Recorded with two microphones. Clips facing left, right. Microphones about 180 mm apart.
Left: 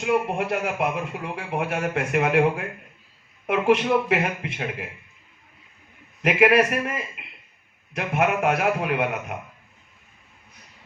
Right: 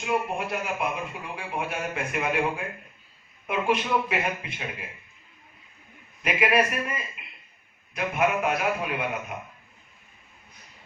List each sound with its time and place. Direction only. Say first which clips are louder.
0.3 s speech: left 5 dB; 70° left (ahead or behind)
6.2 s speech: left 6 dB; 75° left (ahead or behind)